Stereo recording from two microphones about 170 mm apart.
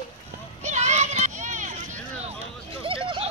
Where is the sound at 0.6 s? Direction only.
45° right (ahead or behind).